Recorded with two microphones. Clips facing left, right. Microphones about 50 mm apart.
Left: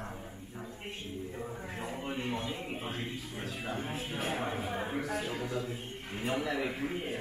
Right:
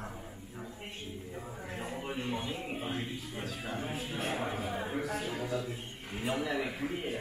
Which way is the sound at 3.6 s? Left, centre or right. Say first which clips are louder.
Left 1 dB; centre.